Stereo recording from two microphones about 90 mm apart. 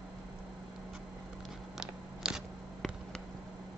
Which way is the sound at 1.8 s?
5° right (ahead or behind).